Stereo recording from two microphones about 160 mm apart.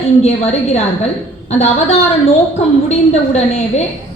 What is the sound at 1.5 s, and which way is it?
A woman's voice, 45° left (ahead or behind).